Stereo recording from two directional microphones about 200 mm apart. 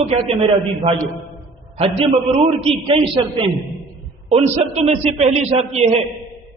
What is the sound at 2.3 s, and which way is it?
A man's voice, 30° right (ahead or behind).